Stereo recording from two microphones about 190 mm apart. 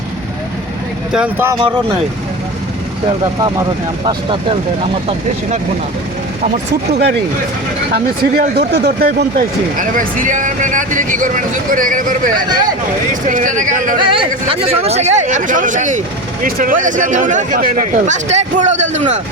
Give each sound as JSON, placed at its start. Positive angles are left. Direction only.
{"t": 1.1, "sound": "speech", "side_deg": -10}
{"t": 1.5, "sound": "speech", "side_deg": -25}
{"t": 3.1, "sound": "speech", "side_deg": -20}
{"t": 7.9, "sound": "speech", "side_deg": -55}
{"t": 12.5, "sound": "speech", "side_deg": -20}
{"t": 13.2, "sound": "speech", "side_deg": -40}
{"t": 14.0, "sound": "speech", "side_deg": -25}